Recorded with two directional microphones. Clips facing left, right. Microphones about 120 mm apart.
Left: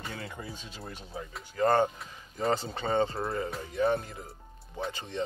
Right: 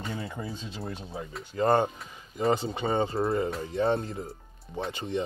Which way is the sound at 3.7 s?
25° right (ahead or behind).